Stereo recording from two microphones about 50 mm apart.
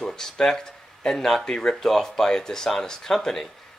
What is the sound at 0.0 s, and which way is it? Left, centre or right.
Speech, centre.